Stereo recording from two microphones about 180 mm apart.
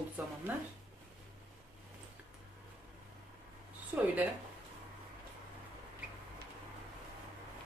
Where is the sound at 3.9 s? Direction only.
10° right (ahead or behind).